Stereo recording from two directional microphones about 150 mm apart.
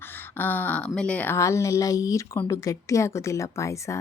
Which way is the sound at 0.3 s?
15° left (ahead or behind).